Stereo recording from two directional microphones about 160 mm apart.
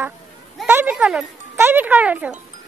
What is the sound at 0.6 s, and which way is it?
Speech, 10° right (ahead or behind).